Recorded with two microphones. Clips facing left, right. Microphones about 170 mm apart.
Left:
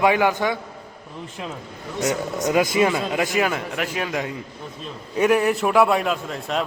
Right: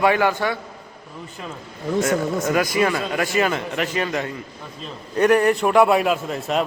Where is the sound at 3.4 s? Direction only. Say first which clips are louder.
Right 2 dB; 5° left (ahead or behind).